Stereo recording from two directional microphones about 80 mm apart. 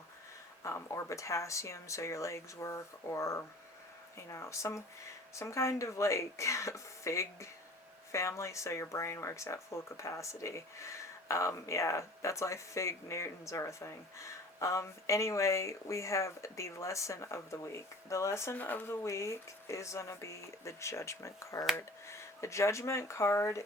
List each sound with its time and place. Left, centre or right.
0.6 s speech: left
18.5 s speech: left
19.0 s speech: left